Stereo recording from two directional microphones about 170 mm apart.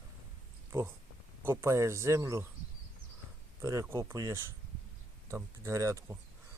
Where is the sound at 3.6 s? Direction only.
15° right (ahead or behind).